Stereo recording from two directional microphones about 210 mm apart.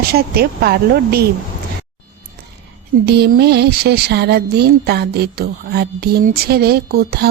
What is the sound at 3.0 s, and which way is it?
Music, 50° right (ahead or behind).